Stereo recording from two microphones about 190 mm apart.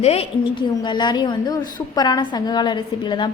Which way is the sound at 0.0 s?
30° left (ahead or behind).